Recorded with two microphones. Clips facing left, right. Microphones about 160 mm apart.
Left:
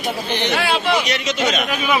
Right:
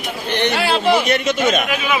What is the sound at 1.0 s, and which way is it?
Speech, 55° right (ahead or behind).